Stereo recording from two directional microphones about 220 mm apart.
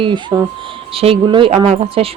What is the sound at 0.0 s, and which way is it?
Speech, 20° right (ahead or behind).